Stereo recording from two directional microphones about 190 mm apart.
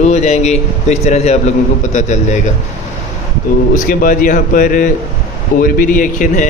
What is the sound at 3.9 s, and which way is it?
A man's voice, 45° left (ahead or behind).